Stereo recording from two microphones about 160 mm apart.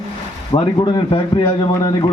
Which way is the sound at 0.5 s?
30° left (ahead or behind).